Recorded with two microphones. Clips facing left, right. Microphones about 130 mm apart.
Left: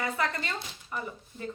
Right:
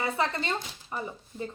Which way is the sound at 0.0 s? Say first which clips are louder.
Right 2 dB; 25° right (ahead or behind).